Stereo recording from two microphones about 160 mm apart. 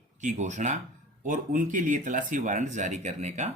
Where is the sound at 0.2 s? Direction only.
50° right (ahead or behind).